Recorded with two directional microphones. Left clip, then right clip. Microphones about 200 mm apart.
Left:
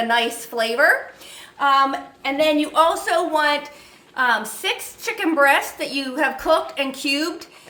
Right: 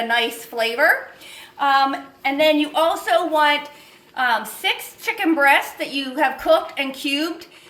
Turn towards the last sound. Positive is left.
turn(degrees=20)  # may be behind; listen again after turning